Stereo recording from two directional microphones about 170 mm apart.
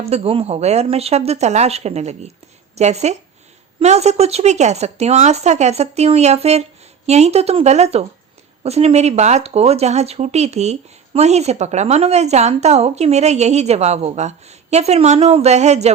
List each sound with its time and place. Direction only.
0.0 s speech: 35° right (ahead or behind)